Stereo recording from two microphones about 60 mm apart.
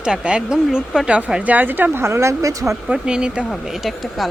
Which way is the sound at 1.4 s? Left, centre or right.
Right.